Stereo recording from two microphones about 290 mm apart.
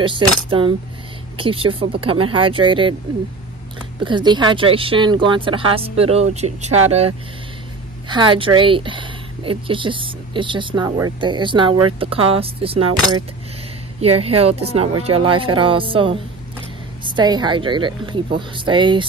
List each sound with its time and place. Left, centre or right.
0.5 s speech: centre
4.0 s speech: centre